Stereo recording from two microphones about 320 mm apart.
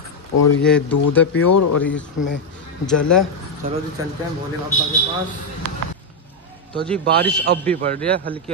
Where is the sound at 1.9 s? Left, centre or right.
Left.